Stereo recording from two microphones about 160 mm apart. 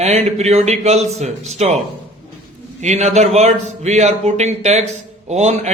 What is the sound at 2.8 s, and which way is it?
A man's voice, 45° right (ahead or behind).